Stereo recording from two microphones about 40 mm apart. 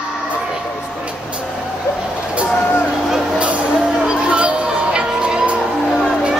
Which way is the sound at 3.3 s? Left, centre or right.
Right.